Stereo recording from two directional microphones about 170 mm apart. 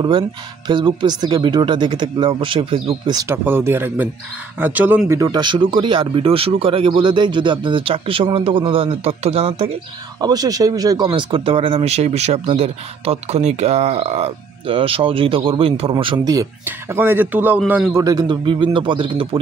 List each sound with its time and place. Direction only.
0.7 s speech: 25° right (ahead or behind)
10.2 s a man's voice: 20° right (ahead or behind)
18.0 s speech: 25° right (ahead or behind)